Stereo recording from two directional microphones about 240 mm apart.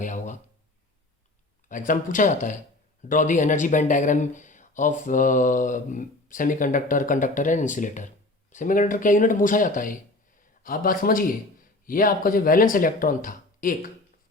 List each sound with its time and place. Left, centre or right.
0.0 s speech: left
1.6 s speech: left